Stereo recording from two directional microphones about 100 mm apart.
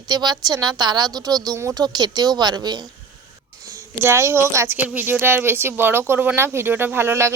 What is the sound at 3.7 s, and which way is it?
Speech, 30° right (ahead or behind).